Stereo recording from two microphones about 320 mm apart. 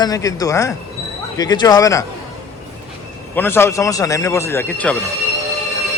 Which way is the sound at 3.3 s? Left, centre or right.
Centre.